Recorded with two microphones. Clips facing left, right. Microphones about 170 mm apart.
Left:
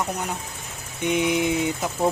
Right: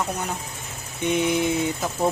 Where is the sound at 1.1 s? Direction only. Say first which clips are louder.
Even; 15° left (ahead or behind).